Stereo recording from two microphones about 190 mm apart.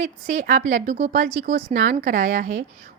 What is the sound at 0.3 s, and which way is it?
Speech, 40° right (ahead or behind).